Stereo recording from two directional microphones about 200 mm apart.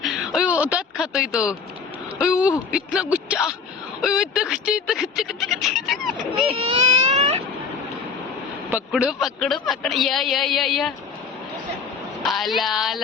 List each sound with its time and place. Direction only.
0.0 s a sound: centre (ahead or behind)
2.4 s a man's voice: 5° right (ahead or behind)
6.6 s baby cry: 35° right (ahead or behind)
8.7 s a man's voice: centre (ahead or behind)
12.2 s a man's voice: centre (ahead or behind)